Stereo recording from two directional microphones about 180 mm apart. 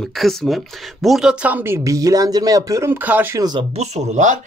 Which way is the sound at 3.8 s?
40° right (ahead or behind).